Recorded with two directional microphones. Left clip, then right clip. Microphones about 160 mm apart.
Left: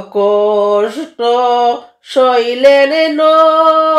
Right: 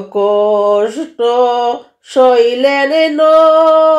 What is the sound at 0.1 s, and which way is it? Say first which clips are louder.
Mantra: even; 35° right (ahead or behind).